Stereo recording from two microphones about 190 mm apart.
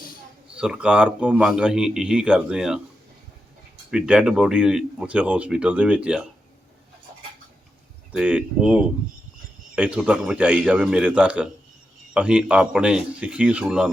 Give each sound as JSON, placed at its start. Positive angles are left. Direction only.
{"t": 0.5, "sound": "a man's voice", "side_deg": -5}
{"t": 3.9, "sound": "a man's voice", "side_deg": -5}
{"t": 8.1, "sound": "a man's voice", "side_deg": -5}